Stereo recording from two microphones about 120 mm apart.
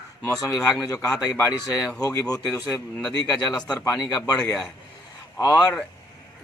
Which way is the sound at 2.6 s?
Centre (ahead or behind).